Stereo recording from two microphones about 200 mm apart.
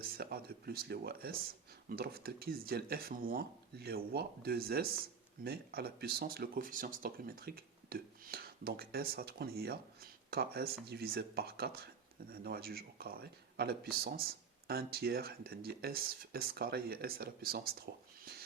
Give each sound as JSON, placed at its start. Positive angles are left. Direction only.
{"t": 0.0, "sound": "speech", "side_deg": -50}